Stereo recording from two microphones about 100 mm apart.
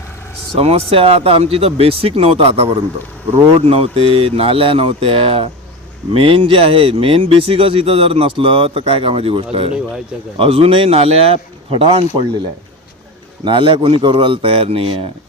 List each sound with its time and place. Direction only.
0.5 s speech: 90° right; by 12.0 s 70° right (ahead or behind)
13.4 s speech: 60° right (ahead or behind)